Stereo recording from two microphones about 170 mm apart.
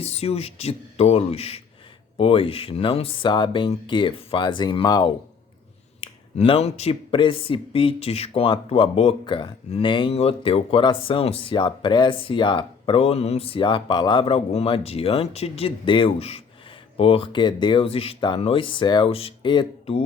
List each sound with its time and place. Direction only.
0.0 s speech: 35° left (ahead or behind)